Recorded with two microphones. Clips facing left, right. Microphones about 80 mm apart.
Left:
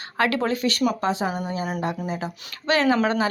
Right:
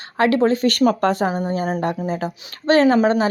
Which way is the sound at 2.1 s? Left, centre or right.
Right.